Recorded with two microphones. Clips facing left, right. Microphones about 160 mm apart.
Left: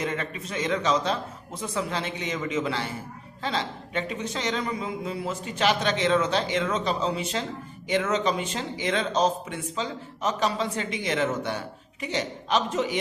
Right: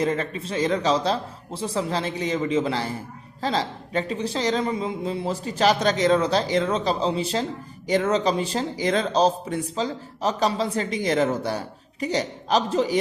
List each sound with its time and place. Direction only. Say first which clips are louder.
0.0 s speech: right 6 dB; 35° right (ahead or behind)